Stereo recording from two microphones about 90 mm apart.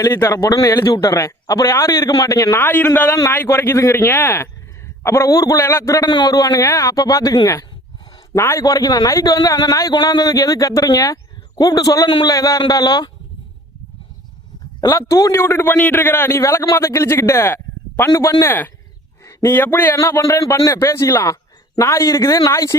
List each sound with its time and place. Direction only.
0.0 s a man's voice: 30° left (ahead or behind)
2.6 s a man's voice: 20° left (ahead or behind)
6.1 s speech: 50° left (ahead or behind)
12.0 s a man's voice: 55° left (ahead or behind)
12.3 s speech: 40° left (ahead or behind)
14.8 s a man's voice: 30° left (ahead or behind)
16.4 s speech: 35° left (ahead or behind)
18.1 s speech: 35° left (ahead or behind)
19.2 s a sound: 35° left (ahead or behind)
19.5 s speech: 20° left (ahead or behind)